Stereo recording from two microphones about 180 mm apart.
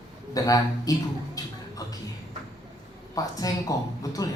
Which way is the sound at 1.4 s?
20° left (ahead or behind).